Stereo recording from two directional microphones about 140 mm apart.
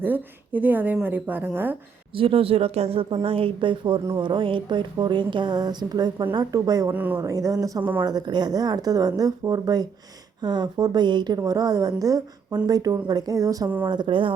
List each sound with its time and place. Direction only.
0.0 s a woman's voice: 15° right (ahead or behind)
2.1 s speech: 40° right (ahead or behind); by 6.9 s 25° right (ahead or behind)
6.9 s a woman's voice: 10° right (ahead or behind)
7.2 s speech: 25° right (ahead or behind)